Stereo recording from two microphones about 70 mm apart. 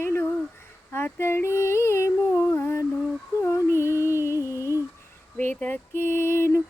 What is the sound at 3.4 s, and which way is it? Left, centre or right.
Female singing, left.